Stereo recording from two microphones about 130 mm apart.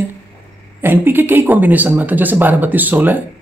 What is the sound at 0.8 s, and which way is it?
A woman's voice, 15° right (ahead or behind).